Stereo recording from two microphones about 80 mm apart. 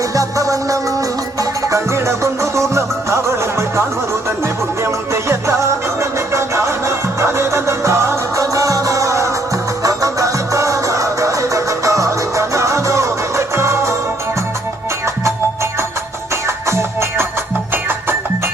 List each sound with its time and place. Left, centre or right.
0.1 s music: right
16.6 s music: right